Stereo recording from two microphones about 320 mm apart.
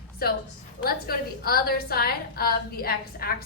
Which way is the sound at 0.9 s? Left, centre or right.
Left.